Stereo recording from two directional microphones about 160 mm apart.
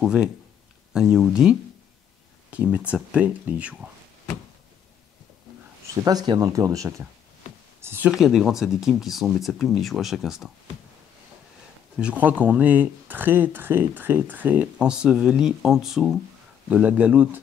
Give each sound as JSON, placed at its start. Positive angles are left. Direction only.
{"t": 0.0, "sound": "speech", "side_deg": -5}
{"t": 6.0, "sound": "speech", "side_deg": -25}
{"t": 12.0, "sound": "speech", "side_deg": -10}